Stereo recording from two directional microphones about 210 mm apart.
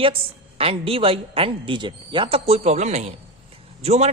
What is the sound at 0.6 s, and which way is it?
A man's voice, 25° right (ahead or behind).